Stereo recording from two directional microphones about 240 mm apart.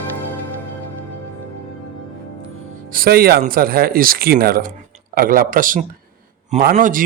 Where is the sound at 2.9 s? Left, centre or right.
Right.